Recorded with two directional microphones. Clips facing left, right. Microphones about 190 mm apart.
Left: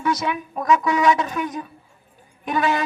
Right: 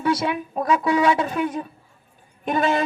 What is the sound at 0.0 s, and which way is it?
A woman's voice, 30° right (ahead or behind).